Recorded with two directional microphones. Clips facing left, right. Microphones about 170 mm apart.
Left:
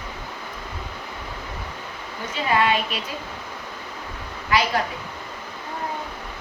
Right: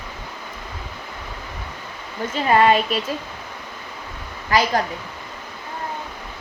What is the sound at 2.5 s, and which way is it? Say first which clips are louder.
Speech: right 5 dB; 45° right (ahead or behind).